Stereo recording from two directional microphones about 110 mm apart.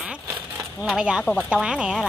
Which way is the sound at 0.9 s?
5° right (ahead or behind).